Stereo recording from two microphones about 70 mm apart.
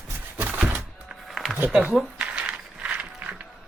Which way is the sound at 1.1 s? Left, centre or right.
Centre.